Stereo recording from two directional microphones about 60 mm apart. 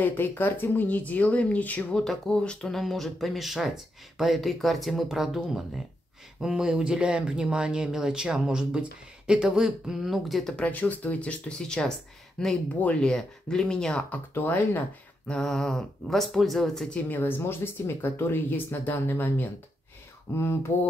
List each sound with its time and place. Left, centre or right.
0.0 s speech: left
2.0 s speech: centre
10.5 s speech: left
14.3 s speech: left
15.2 s speech: centre
17.1 s speech: left
20.3 s a sound: left